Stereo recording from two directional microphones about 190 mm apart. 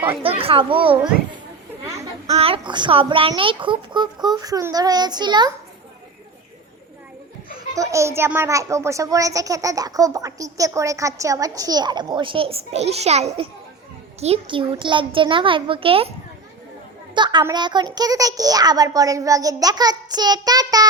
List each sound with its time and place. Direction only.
0.2 s a child's voice: 30° right (ahead or behind)
2.3 s a child's voice: 30° right (ahead or behind)
7.5 s a child's voice: 15° right (ahead or behind)
17.2 s a child's voice: 25° right (ahead or behind)